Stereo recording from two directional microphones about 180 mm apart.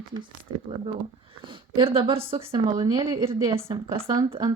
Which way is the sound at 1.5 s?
25° right (ahead or behind).